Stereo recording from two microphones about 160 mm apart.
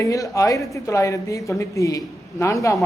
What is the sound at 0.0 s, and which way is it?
Speech, 20° left (ahead or behind).